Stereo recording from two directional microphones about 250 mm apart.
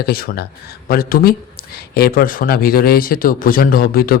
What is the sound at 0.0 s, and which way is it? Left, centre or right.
A man's voice, left.